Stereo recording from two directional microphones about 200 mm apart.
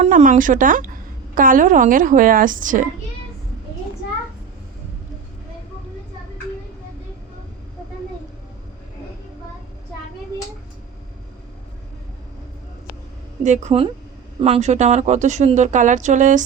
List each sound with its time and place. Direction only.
0.0 s speech: 40° right (ahead or behind)
13.4 s speech: 35° right (ahead or behind)